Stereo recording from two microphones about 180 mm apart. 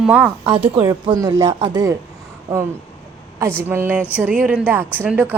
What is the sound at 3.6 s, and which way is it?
A woman's voice, 15° right (ahead or behind).